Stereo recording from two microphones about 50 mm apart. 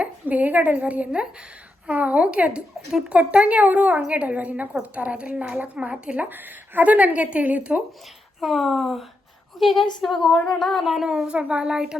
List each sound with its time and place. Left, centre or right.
0.0 s a woman's voice: right
6.2 s a woman's voice: right
8.4 s speech: centre
11.3 s a woman's voice: right